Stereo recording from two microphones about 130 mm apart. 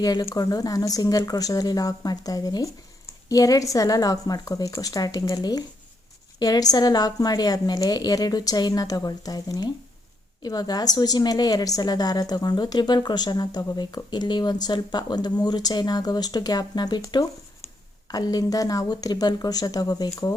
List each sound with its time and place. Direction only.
0.0 s a woman's voice: 30° left (ahead or behind)